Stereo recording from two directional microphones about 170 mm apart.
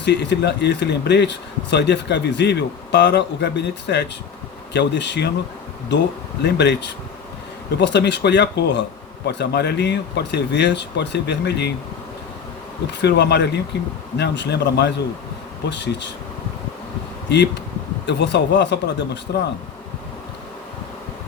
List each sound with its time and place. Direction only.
0.0 s speech: 80° left
6.4 s speech: 85° left
9.2 s speech: 75° left (ahead or behind)
12.9 s speech: 85° left
17.2 s speech: 85° left